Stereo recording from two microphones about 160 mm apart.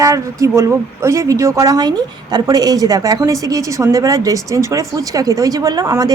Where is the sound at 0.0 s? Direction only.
20° right (ahead or behind).